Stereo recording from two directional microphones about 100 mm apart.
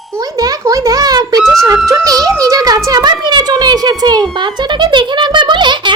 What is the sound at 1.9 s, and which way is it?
A child's voice, 35° right (ahead or behind).